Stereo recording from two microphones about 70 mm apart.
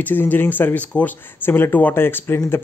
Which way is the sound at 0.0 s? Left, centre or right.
Left.